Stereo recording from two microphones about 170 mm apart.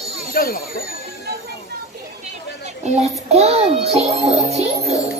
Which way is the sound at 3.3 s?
40° right (ahead or behind).